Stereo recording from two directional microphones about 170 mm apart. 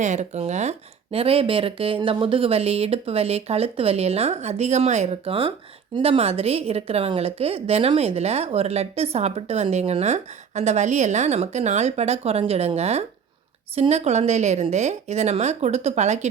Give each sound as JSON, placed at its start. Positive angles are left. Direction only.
{"t": 0.0, "sound": "speech", "side_deg": -45}